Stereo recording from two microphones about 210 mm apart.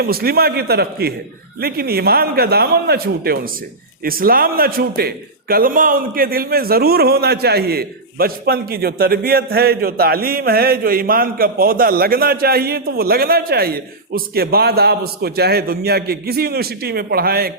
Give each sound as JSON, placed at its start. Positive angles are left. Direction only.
{"t": 0.0, "sound": "a man's voice", "side_deg": -45}